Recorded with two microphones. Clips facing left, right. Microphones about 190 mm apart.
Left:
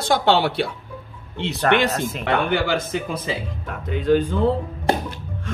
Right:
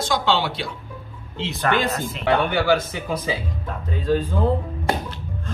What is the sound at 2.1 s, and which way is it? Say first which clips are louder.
Speech: right 1 dB; 55° left (ahead or behind).